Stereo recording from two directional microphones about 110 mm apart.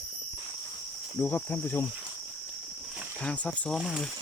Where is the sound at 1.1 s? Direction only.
15° left (ahead or behind).